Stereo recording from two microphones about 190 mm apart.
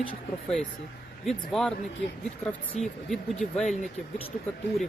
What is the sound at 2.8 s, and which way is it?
Speech, centre (ahead or behind).